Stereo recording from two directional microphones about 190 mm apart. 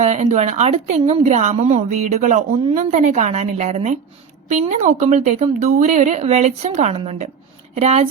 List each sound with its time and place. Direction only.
0.0 s speech: 35° right (ahead or behind)